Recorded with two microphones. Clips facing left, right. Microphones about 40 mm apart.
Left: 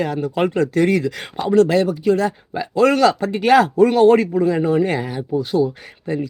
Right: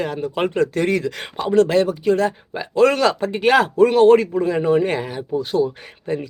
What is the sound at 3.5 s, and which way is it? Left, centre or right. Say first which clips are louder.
A man's voice: left 1 dB; right.